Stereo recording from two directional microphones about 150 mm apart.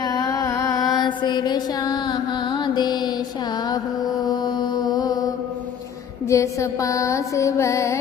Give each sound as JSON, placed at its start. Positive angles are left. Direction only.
{"t": 0.0, "sound": "music", "side_deg": 25}
{"t": 4.3, "sound": "mantra", "side_deg": 30}
{"t": 6.2, "sound": "music", "side_deg": 20}